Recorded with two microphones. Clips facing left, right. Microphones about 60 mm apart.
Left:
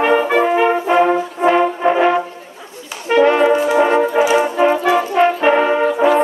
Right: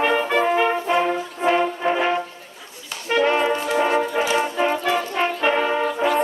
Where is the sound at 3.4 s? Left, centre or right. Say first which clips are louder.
Left 7 dB; centre.